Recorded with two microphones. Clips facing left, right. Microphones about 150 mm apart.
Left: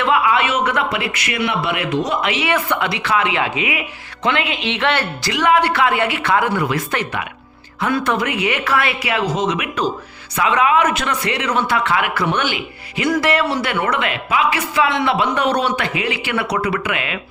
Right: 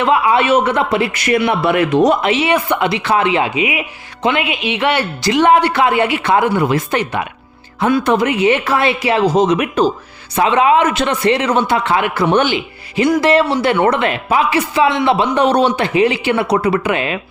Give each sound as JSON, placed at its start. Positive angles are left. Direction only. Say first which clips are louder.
{"t": 0.0, "sound": "a man's voice", "louder": "right 3 dB", "side_deg": -30}
{"t": 2.2, "sound": "speech", "louder": "right 5 dB", "side_deg": -25}
{"t": 5.3, "sound": "speech", "louder": "right 4 dB", "side_deg": -25}